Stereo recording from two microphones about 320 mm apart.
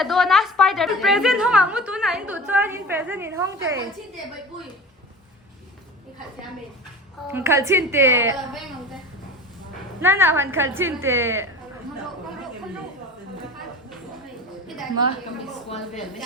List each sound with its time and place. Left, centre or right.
0.0 s a woman's voice: centre
7.3 s a woman's voice: centre
10.0 s a woman's voice: centre